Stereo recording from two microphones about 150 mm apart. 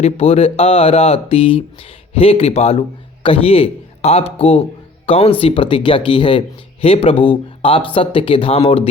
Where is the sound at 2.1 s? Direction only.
40° left (ahead or behind).